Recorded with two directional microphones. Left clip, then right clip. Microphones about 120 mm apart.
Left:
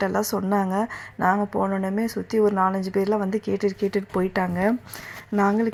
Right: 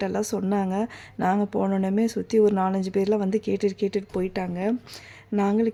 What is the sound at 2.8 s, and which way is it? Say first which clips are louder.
Speech: left 1 dB; 65° right (ahead or behind).